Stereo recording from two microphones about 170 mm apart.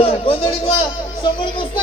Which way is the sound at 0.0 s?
35° left (ahead or behind).